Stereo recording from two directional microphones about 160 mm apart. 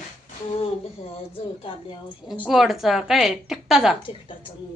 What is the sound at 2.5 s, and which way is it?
A woman's voice, centre (ahead or behind).